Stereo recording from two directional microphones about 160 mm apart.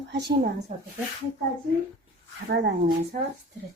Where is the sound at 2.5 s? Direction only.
80° right.